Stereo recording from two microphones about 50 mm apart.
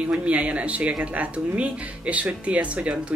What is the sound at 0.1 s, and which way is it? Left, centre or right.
Speech, right.